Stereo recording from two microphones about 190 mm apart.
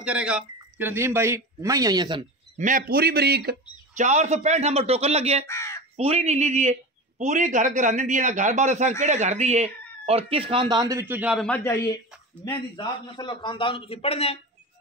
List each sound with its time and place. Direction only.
0.0 s speech: 5° right (ahead or behind); by 2.2 s 25° right (ahead or behind)
2.5 s a man's voice: 40° right (ahead or behind)
3.9 s a man's voice: 40° right (ahead or behind)
5.5 s speech: 15° left (ahead or behind)
5.9 s a man's voice: 35° right (ahead or behind); by 11.5 s 5° right (ahead or behind)
11.5 s a man's voice: 15° left (ahead or behind); by 14.4 s 30° left (ahead or behind)